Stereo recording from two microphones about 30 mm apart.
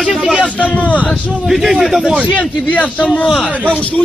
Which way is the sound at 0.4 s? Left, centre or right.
Left.